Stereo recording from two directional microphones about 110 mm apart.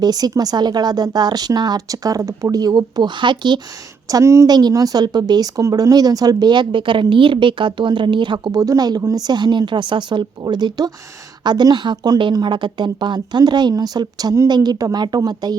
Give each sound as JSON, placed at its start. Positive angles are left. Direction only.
{"t": 0.0, "sound": "a woman's voice", "side_deg": -35}
{"t": 4.1, "sound": "a woman's voice", "side_deg": -25}